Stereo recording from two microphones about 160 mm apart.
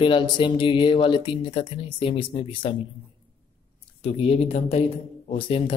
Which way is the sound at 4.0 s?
40° left (ahead or behind).